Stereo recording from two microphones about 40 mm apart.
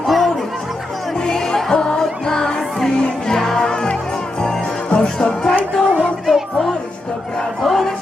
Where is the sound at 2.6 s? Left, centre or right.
Centre.